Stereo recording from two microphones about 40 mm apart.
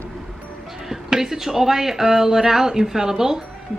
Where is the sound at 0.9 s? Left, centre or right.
Centre.